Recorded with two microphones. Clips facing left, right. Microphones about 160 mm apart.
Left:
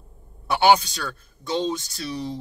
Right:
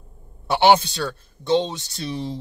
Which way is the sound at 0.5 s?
25° right (ahead or behind).